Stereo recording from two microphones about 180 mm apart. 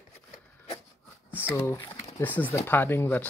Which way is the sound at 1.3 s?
10° left (ahead or behind).